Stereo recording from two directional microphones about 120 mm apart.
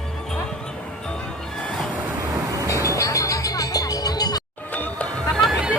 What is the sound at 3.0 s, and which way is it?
Music, 25° left (ahead or behind).